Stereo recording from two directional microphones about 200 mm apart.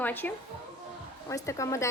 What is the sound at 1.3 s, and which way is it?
Speech, 15° left (ahead or behind).